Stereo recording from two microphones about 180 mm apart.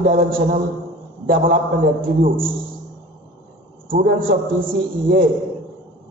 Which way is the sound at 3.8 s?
50° right (ahead or behind).